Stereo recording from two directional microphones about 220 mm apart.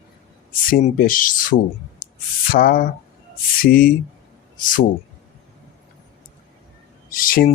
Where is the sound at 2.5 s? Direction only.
40° left (ahead or behind).